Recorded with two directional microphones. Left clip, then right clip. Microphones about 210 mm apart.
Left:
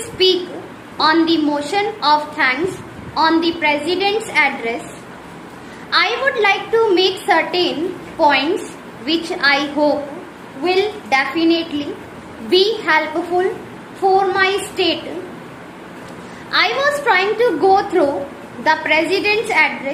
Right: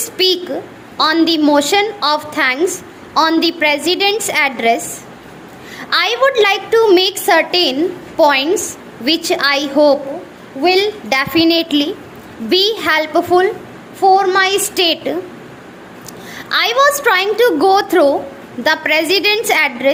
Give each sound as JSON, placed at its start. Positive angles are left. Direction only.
{"t": 0.2, "sound": "a woman's voice", "side_deg": -50}
{"t": 5.9, "sound": "a woman's voice", "side_deg": -50}
{"t": 16.5, "sound": "a woman's voice", "side_deg": -55}